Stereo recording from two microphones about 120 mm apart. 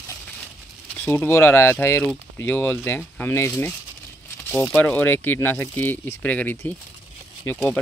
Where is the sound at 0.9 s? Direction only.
20° left (ahead or behind).